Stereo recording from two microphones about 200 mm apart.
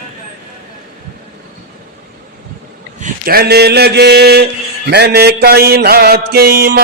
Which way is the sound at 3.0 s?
50° right (ahead or behind).